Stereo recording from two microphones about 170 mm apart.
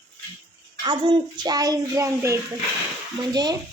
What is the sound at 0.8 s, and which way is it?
A child's voice, 30° right (ahead or behind).